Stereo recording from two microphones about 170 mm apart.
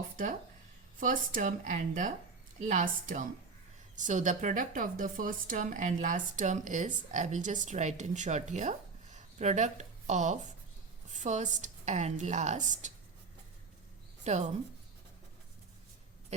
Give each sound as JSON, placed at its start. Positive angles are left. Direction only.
{"t": 0.9, "sound": "speech", "side_deg": -50}
{"t": 14.3, "sound": "speech", "side_deg": -40}